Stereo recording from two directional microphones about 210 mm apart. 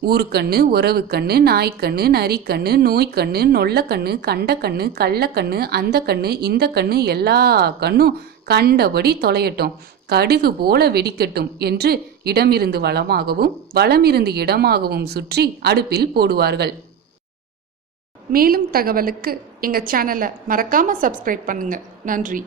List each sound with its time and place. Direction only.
0.0 s a woman's voice: 50° right (ahead or behind)
18.3 s a woman's voice: 45° right (ahead or behind)